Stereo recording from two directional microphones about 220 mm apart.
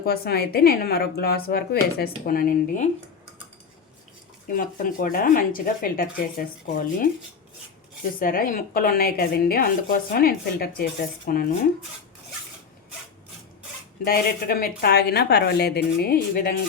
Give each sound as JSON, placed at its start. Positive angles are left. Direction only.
{"t": 0.0, "sound": "speech", "side_deg": 45}
{"t": 4.4, "sound": "speech", "side_deg": 40}
{"t": 8.2, "sound": "speech", "side_deg": 40}
{"t": 14.0, "sound": "speech", "side_deg": 45}